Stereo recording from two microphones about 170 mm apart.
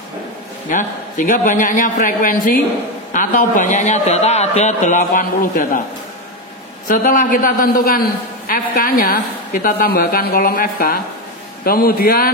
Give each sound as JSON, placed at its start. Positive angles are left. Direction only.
{"t": 0.7, "sound": "a man's voice", "side_deg": 50}
{"t": 6.9, "sound": "a man's voice", "side_deg": 55}